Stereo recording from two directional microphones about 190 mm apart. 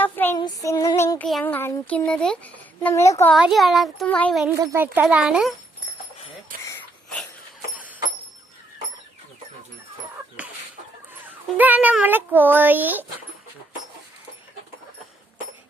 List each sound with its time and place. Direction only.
0.0 s female singing: 10° left (ahead or behind)
0.3 s speech: 20° left (ahead or behind)
3.3 s speech: centre (ahead or behind)
4.6 s speech: 10° right (ahead or behind)
6.7 s a sound: 10° left (ahead or behind)
10.4 s chicken: 10° right (ahead or behind)
11.5 s a child's voice: 10° right (ahead or behind)